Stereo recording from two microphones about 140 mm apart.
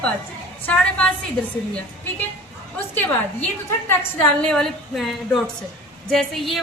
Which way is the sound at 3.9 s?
15° left (ahead or behind).